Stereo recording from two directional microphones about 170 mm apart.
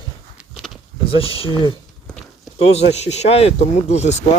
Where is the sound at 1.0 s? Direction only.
30° left (ahead or behind).